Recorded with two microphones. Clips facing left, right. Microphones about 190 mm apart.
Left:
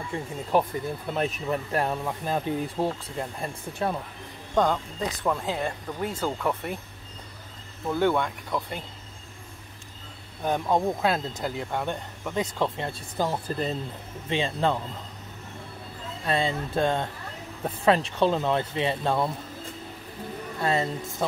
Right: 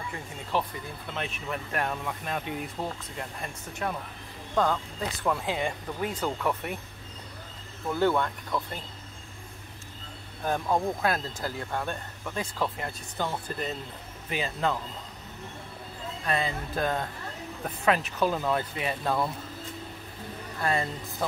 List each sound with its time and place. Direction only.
0.1 s speech: 30° left (ahead or behind)
0.5 s speech: 45° left (ahead or behind); by 3.9 s 30° left (ahead or behind)
4.6 s speech: 15° left (ahead or behind)
5.4 s speech: 10° right (ahead or behind)
7.9 s speech: 15° left (ahead or behind)
10.4 s speech: 15° left (ahead or behind)
16.3 s speech: 30° left (ahead or behind)
20.5 s speech: 25° left (ahead or behind)